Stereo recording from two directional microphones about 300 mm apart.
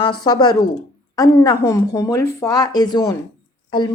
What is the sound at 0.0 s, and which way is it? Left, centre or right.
A woman's voice, centre.